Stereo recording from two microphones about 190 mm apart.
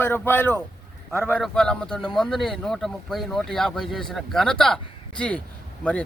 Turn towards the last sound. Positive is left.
turn(degrees=5)  # may be behind; listen again after turning